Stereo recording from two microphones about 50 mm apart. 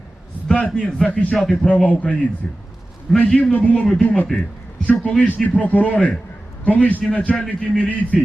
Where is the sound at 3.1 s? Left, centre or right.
Centre.